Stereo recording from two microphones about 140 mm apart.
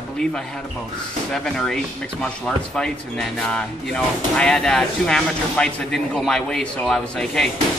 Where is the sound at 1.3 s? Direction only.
5° left (ahead or behind).